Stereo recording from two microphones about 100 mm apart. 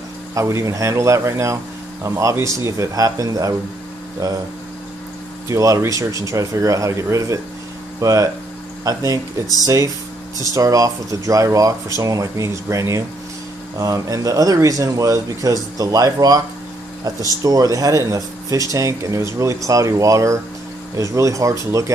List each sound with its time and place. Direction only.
0.3 s speech: 30° right (ahead or behind)
5.5 s speech: 30° right (ahead or behind)
10.4 s speech: 35° right (ahead or behind)